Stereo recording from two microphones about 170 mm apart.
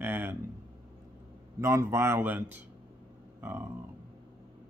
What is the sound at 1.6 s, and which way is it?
Speech, 15° right (ahead or behind).